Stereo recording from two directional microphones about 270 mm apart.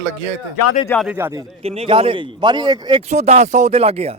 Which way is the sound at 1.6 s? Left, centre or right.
Right.